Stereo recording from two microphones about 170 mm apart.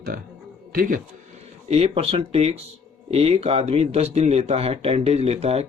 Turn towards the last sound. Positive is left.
turn(degrees=-35)  # may be behind; listen again after turning